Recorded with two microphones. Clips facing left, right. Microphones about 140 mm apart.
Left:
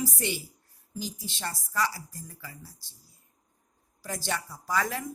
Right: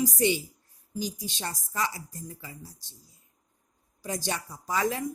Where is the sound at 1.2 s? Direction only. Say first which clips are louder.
Right 1 dB; 15° right (ahead or behind).